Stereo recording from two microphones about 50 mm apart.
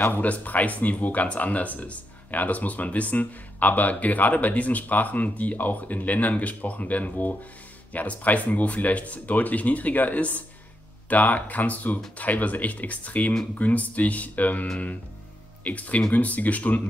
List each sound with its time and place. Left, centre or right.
0.2 s speech: left